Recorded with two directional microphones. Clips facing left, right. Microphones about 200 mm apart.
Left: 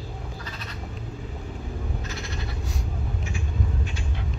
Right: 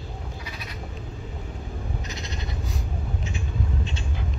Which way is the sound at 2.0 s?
20° right (ahead or behind).